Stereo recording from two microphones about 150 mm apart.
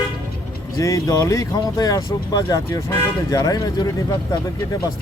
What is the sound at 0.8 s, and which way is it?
Speech, 20° left (ahead or behind).